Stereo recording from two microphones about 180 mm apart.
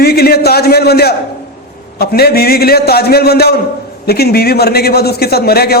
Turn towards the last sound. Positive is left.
turn(degrees=60)  # may be behind; listen again after turning